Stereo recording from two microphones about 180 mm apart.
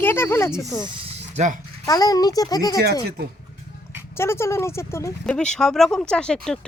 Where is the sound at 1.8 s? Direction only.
20° left (ahead or behind).